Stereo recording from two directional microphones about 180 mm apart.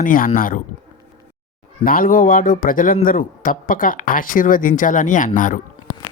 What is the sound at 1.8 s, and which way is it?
Speech, 50° left (ahead or behind).